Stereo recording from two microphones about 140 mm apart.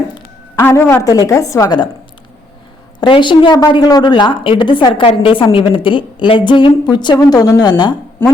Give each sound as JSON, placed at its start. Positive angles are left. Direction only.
{"t": 0.5, "sound": "a woman's voice", "side_deg": 15}
{"t": 3.0, "sound": "a woman's voice", "side_deg": 35}